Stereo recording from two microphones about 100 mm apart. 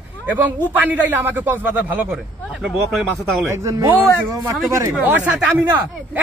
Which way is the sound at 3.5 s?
30° right (ahead or behind).